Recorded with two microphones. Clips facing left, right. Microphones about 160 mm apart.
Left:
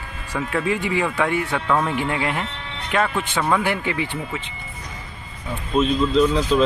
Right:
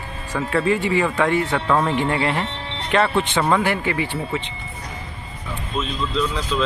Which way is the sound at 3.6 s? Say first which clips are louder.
Right 1 dB; 15° left (ahead or behind).